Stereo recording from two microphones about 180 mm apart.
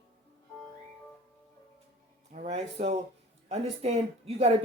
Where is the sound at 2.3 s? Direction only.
35° right (ahead or behind).